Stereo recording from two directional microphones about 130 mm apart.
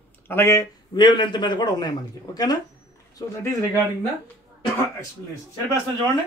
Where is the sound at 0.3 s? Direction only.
20° left (ahead or behind).